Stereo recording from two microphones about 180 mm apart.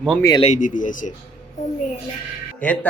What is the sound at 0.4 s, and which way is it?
Speech, 45° left (ahead or behind).